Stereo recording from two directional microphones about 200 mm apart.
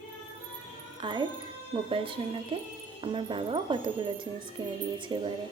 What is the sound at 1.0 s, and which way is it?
Speech, 25° right (ahead or behind).